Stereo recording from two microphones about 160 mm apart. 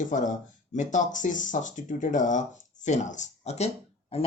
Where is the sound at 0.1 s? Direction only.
50° left (ahead or behind).